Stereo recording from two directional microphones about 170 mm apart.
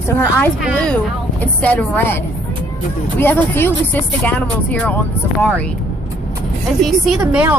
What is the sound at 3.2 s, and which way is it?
A woman's voice, 10° left (ahead or behind).